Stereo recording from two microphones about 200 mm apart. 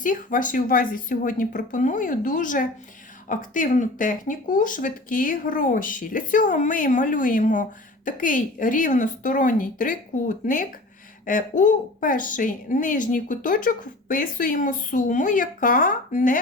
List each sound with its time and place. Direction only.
0.0 s a woman's voice: 40° left (ahead or behind)